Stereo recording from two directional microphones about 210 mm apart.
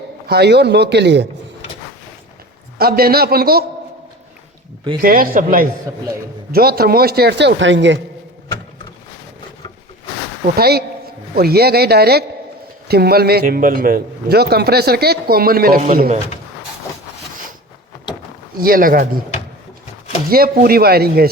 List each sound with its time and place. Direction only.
0.3 s a man's voice: 50° right (ahead or behind)
2.7 s a man's voice: 45° right (ahead or behind)
4.9 s a man's voice: 45° right (ahead or behind); by 7.9 s 60° right (ahead or behind)
10.4 s a man's voice: 45° right (ahead or behind)
18.5 s a man's voice: 45° right (ahead or behind)
20.3 s a man's voice: 45° right (ahead or behind)